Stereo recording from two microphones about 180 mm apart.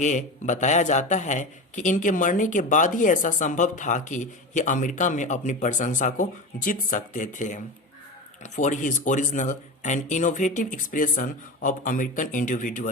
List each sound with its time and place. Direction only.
0.0 s speech: 45° left (ahead or behind)